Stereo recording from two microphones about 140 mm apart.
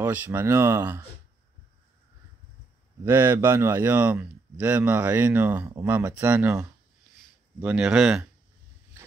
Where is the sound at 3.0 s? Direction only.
15° right (ahead or behind).